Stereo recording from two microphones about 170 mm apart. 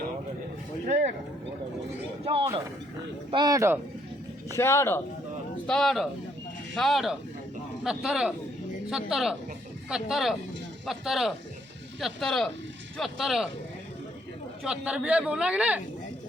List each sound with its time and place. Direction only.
0.9 s a sound: 45° right (ahead or behind)
3.3 s speech: 20° right (ahead or behind)
4.5 s speech: 15° left (ahead or behind)
5.6 s speech: 5° left (ahead or behind)
14.6 s a man's voice: 5° right (ahead or behind)